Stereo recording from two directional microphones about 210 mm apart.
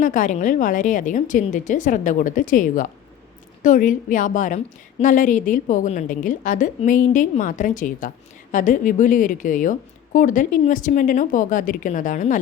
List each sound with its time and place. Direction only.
0.0 s a woman's voice: 40° left (ahead or behind)